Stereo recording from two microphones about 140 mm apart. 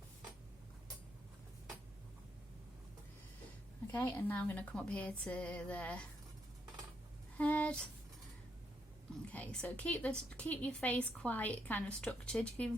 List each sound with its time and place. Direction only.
3.9 s a woman's voice: 15° left (ahead or behind)
7.3 s speech: 10° left (ahead or behind)
9.3 s a woman's voice: 10° left (ahead or behind)